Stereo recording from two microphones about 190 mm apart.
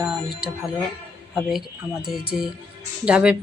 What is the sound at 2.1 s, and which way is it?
Speech, 50° left (ahead or behind).